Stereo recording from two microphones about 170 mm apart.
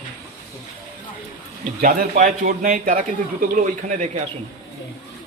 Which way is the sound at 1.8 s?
50° right (ahead or behind).